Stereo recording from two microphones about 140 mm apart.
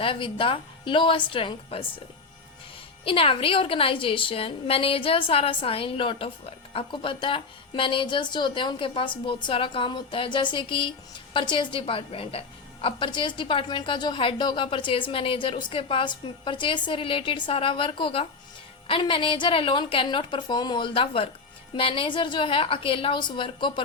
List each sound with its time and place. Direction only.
0.0 s a woman's voice: 40° left (ahead or behind)
3.0 s a woman's voice: 40° left (ahead or behind)